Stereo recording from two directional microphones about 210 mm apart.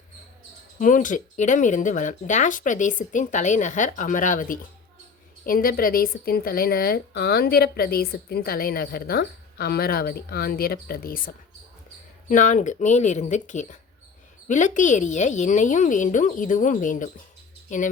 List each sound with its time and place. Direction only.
0.8 s a woman's voice: 40° left (ahead or behind)
12.3 s speech: 35° left (ahead or behind)